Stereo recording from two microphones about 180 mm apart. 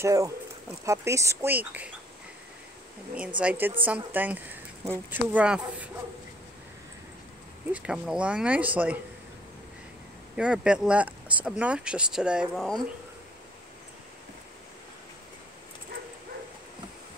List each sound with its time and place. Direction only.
0.0 s speech: 15° right (ahead or behind)
3.3 s speech: 10° right (ahead or behind)
7.7 s speech: 5° right (ahead or behind)
10.3 s speech: 5° right (ahead or behind)